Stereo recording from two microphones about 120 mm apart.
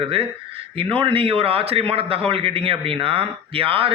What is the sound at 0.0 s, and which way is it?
A man's voice, 50° right (ahead or behind).